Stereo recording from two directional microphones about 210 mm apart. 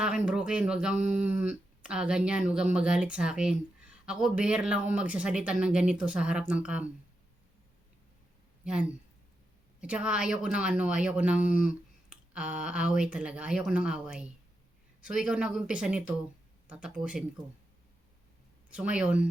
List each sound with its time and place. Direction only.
0.0 s speech: 5° right (ahead or behind)
8.6 s speech: 5° right (ahead or behind)
18.7 s speech: 5° right (ahead or behind)